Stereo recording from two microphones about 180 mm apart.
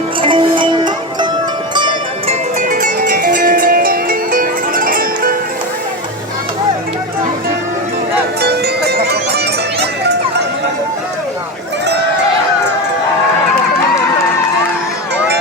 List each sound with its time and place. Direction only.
0.2 s music: 30° right (ahead or behind)
2.6 s music: 45° right (ahead or behind)
8.4 s music: 65° right (ahead or behind)
9.8 s a sound: 65° right (ahead or behind)